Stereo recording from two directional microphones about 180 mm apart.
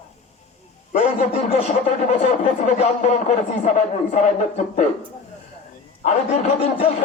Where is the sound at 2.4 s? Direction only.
40° left (ahead or behind).